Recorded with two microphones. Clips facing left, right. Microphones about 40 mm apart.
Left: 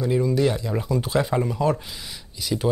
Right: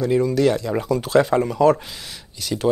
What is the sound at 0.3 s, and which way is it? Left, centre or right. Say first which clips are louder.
Speech: right 3 dB; right.